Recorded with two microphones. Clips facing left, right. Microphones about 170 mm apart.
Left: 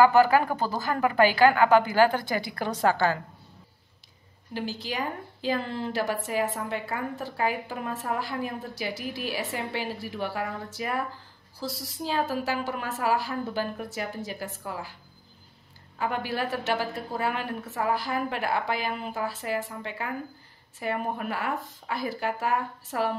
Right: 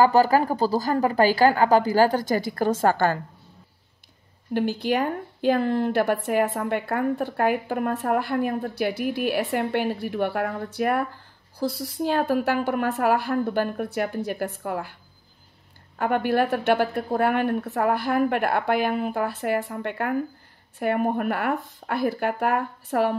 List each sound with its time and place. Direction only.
0.0 s a woman's voice: 35° right (ahead or behind)
4.6 s a woman's voice: 55° right (ahead or behind)
16.0 s a woman's voice: 55° right (ahead or behind)